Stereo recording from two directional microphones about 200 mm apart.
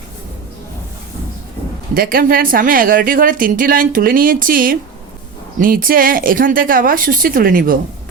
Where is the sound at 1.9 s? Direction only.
45° right (ahead or behind).